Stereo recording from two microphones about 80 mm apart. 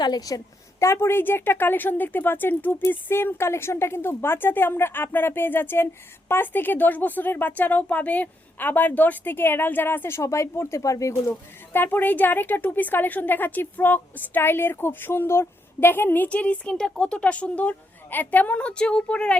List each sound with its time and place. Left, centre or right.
0.0 s a woman's voice: left
0.8 s a woman's voice: left
11.7 s a woman's voice: left